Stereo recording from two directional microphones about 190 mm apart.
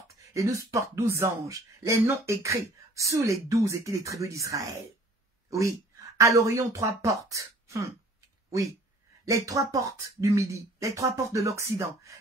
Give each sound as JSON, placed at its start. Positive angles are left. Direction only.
{"t": 0.1, "sound": "speech", "side_deg": -15}